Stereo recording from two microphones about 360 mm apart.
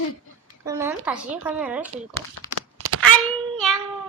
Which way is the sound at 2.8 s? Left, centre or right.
Right.